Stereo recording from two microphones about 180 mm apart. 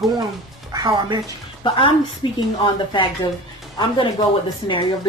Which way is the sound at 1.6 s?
30° left (ahead or behind).